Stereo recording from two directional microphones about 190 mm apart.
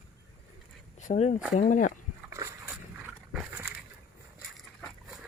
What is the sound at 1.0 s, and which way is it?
Speech, 40° left (ahead or behind).